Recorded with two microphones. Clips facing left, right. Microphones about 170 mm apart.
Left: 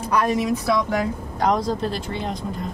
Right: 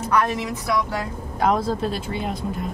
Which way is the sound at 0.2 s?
20° left (ahead or behind).